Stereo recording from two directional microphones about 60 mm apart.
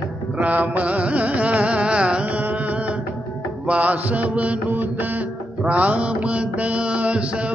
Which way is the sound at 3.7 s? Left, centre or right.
Right.